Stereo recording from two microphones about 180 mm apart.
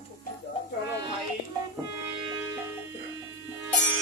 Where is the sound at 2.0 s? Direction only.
20° right (ahead or behind).